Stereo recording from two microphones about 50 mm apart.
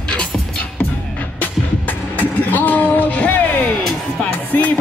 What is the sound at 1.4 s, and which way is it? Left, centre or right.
Music, left.